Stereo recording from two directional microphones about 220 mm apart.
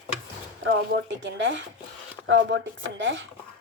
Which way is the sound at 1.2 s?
55° right (ahead or behind).